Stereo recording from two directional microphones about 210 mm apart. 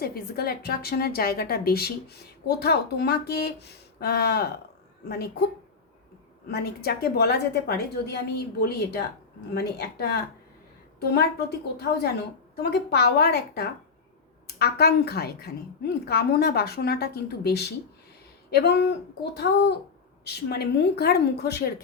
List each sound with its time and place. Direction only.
0.0 s a woman's voice: 50° left (ahead or behind)
6.5 s a woman's voice: 50° left (ahead or behind)